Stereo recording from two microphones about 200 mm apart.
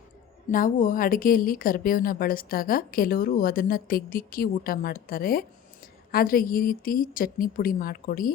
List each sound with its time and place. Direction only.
0.5 s a woman's voice: 40° left (ahead or behind)